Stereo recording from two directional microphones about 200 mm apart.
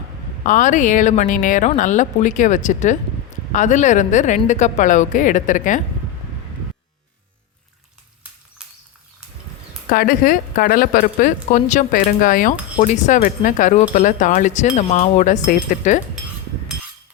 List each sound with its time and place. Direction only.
0.4 s a woman's voice: 40° left (ahead or behind)
9.9 s a woman's voice: 45° left (ahead or behind)